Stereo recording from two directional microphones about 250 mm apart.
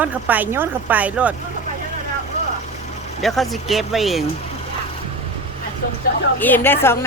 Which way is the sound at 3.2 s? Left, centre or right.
Centre.